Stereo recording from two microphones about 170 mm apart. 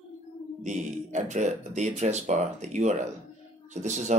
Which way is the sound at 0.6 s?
45° right (ahead or behind).